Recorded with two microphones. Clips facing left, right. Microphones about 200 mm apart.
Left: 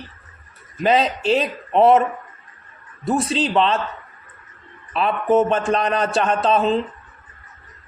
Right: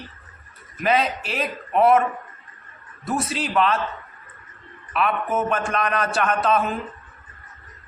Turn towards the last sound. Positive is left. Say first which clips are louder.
# left 4 dB
turn(degrees=25)  # may be behind; listen again after turning